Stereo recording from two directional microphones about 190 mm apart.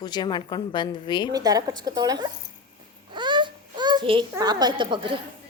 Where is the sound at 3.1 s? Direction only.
25° right (ahead or behind).